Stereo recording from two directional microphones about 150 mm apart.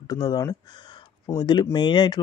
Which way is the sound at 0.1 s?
25° left (ahead or behind).